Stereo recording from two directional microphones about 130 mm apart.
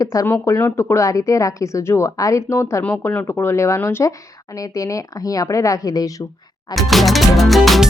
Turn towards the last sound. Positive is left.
turn(degrees=0)  # may be behind; listen again after turning